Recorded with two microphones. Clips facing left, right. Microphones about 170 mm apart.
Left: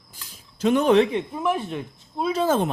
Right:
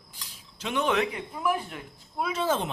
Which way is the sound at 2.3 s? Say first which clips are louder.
Left 6 dB; 45° left (ahead or behind).